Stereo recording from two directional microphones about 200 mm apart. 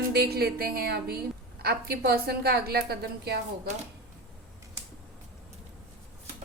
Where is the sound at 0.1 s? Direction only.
50° right (ahead or behind).